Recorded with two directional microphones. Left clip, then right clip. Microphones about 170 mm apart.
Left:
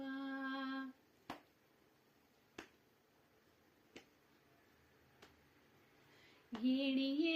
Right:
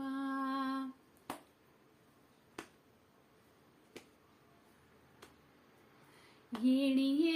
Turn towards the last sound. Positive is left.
turn(degrees=-15)  # may be behind; listen again after turning